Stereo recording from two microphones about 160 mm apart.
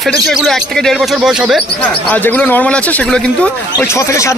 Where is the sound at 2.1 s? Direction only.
10° left (ahead or behind).